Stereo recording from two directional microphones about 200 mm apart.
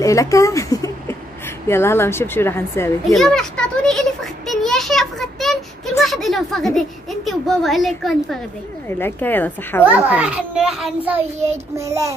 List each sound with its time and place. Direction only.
0.0 s a sound: 15° left (ahead or behind)
1.7 s a woman's voice: 10° left (ahead or behind)
3.2 s a sound: 5° left (ahead or behind)
8.8 s a woman's voice: 10° left (ahead or behind)
9.8 s a child's voice: 5° right (ahead or behind)
11.3 s child singing: 35° right (ahead or behind)
11.7 s a child's voice: 15° right (ahead or behind)